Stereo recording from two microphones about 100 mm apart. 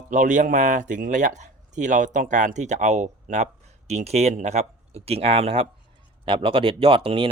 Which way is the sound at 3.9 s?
90° right.